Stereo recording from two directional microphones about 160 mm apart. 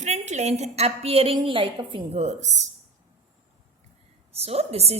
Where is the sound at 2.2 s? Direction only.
45° right (ahead or behind).